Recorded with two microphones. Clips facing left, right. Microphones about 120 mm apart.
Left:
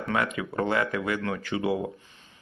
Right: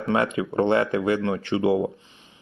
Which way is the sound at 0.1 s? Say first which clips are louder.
Right 6 dB; 30° right (ahead or behind).